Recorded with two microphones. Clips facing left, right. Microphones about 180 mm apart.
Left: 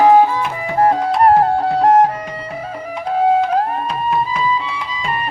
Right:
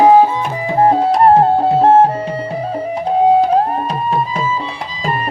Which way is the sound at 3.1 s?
30° right (ahead or behind).